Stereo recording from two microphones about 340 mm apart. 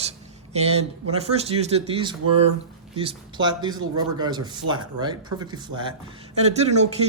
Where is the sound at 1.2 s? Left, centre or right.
Centre.